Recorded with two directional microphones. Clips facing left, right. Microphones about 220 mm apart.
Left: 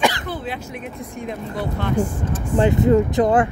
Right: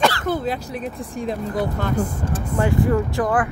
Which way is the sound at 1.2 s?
40° right (ahead or behind).